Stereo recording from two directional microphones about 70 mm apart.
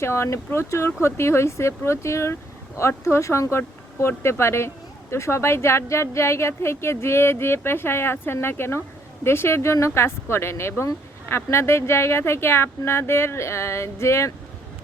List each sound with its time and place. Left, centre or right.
0.0 s speech: left